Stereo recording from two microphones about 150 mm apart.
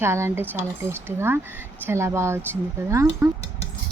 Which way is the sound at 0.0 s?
15° right (ahead or behind).